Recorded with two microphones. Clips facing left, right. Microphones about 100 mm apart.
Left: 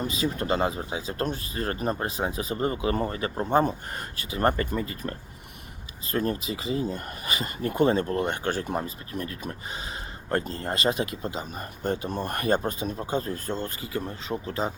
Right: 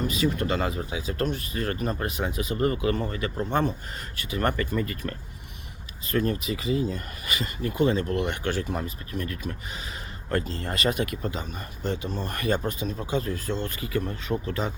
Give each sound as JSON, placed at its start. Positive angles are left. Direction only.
{"t": 0.1, "sound": "speech", "side_deg": 35}
{"t": 6.1, "sound": "speech", "side_deg": 30}
{"t": 8.0, "sound": "speech", "side_deg": 35}
{"t": 10.6, "sound": "speech", "side_deg": 30}
{"t": 11.4, "sound": "speech", "side_deg": 45}
{"t": 13.8, "sound": "speech", "side_deg": 25}